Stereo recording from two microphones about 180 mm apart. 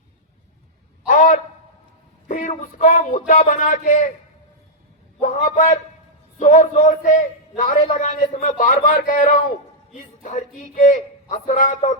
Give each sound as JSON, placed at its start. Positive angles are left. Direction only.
{"t": 1.0, "sound": "a sound", "side_deg": 45}
{"t": 2.2, "sound": "a man's voice", "side_deg": 45}
{"t": 5.2, "sound": "a man's voice", "side_deg": 45}